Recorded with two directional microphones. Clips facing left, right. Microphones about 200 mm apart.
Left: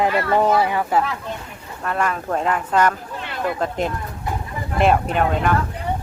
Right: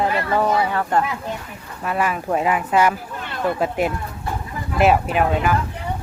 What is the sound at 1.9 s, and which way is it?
Speech, 5° right (ahead or behind).